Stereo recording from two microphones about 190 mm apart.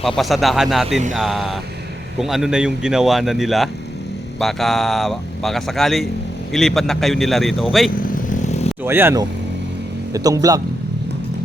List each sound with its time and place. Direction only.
0.2 s speech: centre (ahead or behind)
7.9 s vehicle: 45° left (ahead or behind)
8.8 s speech: 10° right (ahead or behind)